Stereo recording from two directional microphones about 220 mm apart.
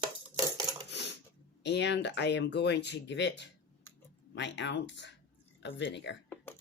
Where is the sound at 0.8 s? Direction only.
50° left (ahead or behind).